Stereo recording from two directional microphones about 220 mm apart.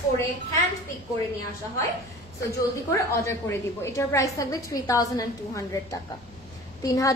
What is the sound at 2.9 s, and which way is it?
A woman's voice, 10° left (ahead or behind).